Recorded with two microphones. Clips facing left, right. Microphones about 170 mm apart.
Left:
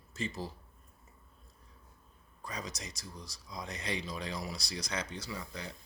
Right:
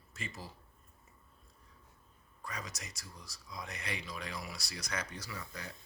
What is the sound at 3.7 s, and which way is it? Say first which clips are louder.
Speech: left 6 dB; 20° left (ahead or behind).